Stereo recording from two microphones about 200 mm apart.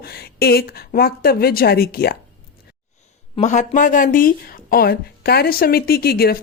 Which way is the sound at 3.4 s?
35° left (ahead or behind).